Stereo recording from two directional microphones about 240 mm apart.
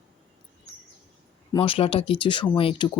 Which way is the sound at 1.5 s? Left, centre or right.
Left.